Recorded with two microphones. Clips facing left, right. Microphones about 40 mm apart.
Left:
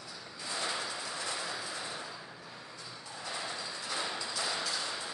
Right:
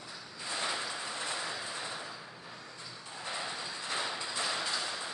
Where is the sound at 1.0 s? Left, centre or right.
Right.